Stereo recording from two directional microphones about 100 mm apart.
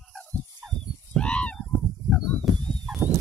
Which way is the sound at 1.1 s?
10° left (ahead or behind).